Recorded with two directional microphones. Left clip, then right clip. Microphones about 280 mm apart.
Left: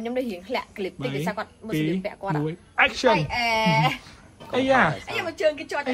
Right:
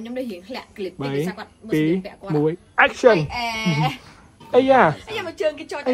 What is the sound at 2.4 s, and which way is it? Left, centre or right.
Speech, centre.